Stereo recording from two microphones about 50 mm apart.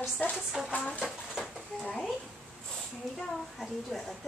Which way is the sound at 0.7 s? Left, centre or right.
Left.